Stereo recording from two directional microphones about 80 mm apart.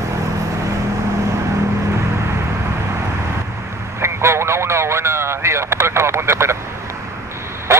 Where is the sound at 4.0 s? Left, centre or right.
Right.